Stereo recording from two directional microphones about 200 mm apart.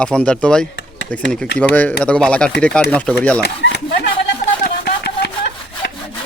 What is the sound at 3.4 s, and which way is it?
Speech, 55° left (ahead or behind).